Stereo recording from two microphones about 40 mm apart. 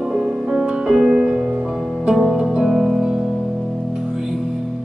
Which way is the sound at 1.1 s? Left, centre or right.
Right.